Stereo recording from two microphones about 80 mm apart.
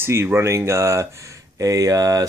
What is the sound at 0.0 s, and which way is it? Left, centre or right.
Speech, right.